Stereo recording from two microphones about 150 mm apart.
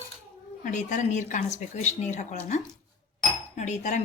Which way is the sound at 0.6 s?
55° left (ahead or behind).